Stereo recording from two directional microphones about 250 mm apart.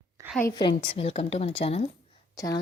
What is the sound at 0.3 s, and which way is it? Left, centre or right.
Speech, centre.